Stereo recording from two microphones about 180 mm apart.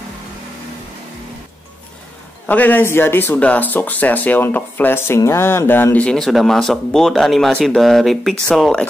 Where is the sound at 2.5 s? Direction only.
10° left (ahead or behind).